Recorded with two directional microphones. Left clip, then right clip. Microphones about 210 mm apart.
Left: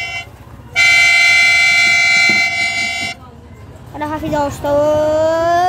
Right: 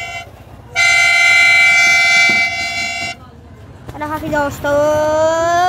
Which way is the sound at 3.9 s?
15° left (ahead or behind).